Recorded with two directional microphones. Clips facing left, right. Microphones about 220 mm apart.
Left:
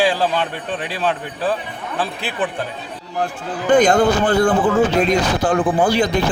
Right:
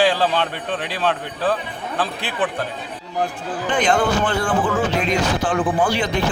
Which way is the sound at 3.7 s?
40° left (ahead or behind).